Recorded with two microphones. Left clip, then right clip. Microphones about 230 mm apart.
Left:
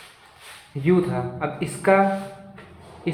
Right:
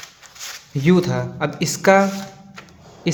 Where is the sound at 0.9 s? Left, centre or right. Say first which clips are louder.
Right 3 dB; right.